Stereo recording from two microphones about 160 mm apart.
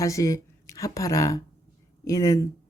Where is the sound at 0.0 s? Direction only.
20° left (ahead or behind).